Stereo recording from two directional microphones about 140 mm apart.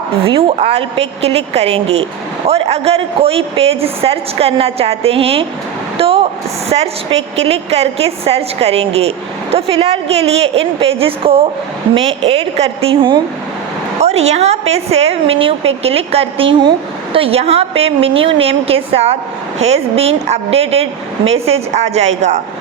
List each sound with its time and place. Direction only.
0.3 s a woman's voice: 40° right (ahead or behind)
6.0 s a sound: 45° right (ahead or behind)
7.4 s a woman's voice: 45° right (ahead or behind)
14.0 s a woman's voice: 50° right (ahead or behind)